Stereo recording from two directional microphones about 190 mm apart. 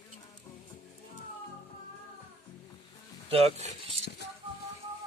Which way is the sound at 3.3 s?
35° right (ahead or behind).